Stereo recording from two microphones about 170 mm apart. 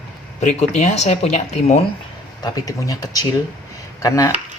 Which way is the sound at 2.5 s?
20° left (ahead or behind).